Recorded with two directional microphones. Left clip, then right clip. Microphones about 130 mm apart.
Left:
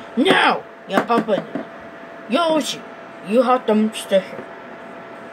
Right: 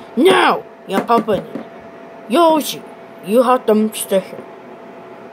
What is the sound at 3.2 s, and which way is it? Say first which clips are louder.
Speech: right 3 dB; 60° right (ahead or behind).